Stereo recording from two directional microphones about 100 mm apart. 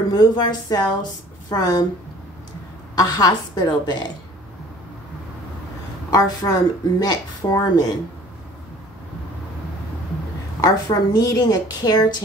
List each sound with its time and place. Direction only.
0.1 s a woman's voice: 45° left (ahead or behind)
3.0 s a woman's voice: 40° left (ahead or behind)
6.0 s speech: 40° left (ahead or behind)
10.6 s speech: 40° left (ahead or behind)